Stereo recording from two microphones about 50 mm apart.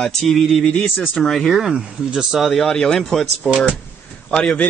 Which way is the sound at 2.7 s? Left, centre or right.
Centre.